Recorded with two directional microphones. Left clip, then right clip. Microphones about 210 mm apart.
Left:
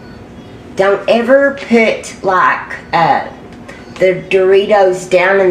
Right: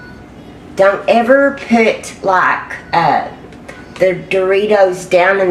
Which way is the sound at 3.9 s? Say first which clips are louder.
Left 2 dB; 15° right (ahead or behind).